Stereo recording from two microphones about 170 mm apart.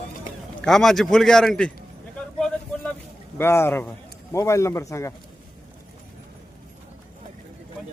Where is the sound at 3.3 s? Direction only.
15° left (ahead or behind).